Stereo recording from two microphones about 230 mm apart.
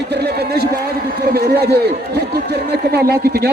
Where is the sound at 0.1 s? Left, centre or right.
Right.